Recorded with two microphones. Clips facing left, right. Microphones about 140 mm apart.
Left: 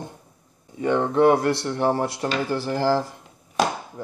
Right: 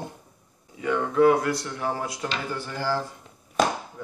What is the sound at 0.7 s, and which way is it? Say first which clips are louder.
Speech: left 3 dB; 35° left (ahead or behind).